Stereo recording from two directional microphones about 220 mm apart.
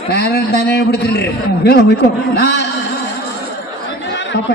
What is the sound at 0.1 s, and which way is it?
A man's voice, 50° left (ahead or behind).